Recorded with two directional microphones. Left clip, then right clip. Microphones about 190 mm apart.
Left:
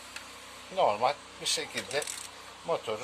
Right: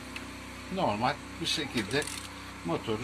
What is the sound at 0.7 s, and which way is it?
Speech, 45° left (ahead or behind).